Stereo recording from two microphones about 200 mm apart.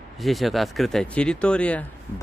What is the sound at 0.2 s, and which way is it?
Speech, centre (ahead or behind).